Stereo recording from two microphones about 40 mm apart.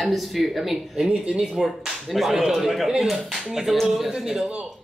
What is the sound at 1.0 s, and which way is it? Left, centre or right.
Speech, centre.